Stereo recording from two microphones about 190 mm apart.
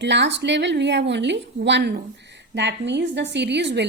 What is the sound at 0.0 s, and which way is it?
A woman's voice, 65° right (ahead or behind).